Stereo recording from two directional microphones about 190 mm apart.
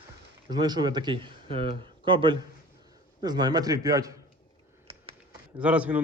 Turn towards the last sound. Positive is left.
turn(degrees=-5)  # may be behind; listen again after turning